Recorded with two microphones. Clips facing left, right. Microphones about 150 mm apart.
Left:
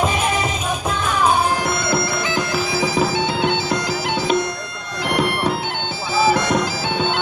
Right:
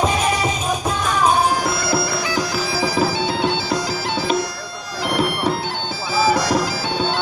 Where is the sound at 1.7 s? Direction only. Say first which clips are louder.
Even; 55° left (ahead or behind).